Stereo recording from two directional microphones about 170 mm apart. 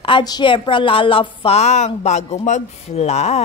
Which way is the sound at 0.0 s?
25° left (ahead or behind).